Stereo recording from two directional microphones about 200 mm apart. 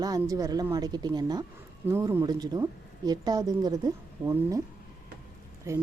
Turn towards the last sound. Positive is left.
turn(degrees=-15)  # may be behind; listen again after turning